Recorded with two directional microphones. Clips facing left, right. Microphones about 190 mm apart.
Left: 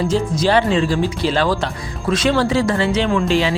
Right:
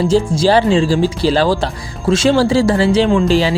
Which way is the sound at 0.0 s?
30° right (ahead or behind).